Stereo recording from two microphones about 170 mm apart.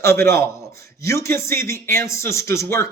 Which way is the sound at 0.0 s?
15° left (ahead or behind).